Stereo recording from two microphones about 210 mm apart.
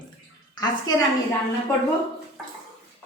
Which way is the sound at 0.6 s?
20° left (ahead or behind).